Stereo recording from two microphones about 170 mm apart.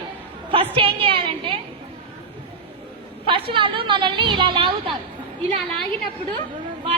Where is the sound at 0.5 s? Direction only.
35° right (ahead or behind).